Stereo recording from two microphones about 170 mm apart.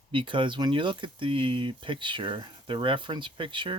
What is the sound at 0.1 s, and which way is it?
Speech, 30° right (ahead or behind).